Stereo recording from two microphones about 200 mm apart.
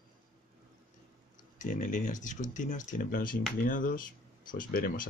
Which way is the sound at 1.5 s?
40° left (ahead or behind).